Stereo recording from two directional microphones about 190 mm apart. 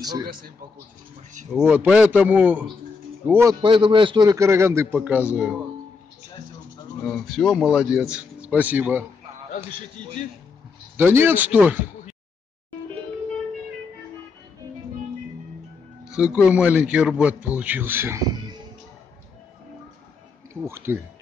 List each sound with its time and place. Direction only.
0.0 s a man's voice: 20° right (ahead or behind)
1.7 s a man's voice: 5° right (ahead or behind)
3.6 s a man's voice: 25° right (ahead or behind); by 5.6 s 5° right (ahead or behind)
7.1 s speech: centre (ahead or behind)
9.5 s a man's voice: 40° left (ahead or behind)
11.0 s a man's voice: 10° right (ahead or behind)
16.1 s a man's voice: 5° right (ahead or behind)
20.6 s a man's voice: 15° right (ahead or behind)